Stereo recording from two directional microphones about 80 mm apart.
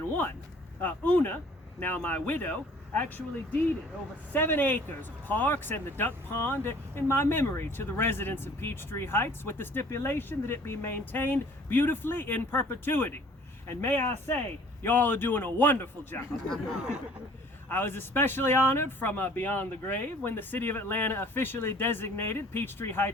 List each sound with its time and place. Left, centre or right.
0.8 s speech: left
4.3 s speech: left
16.5 s speech: centre
17.7 s speech: left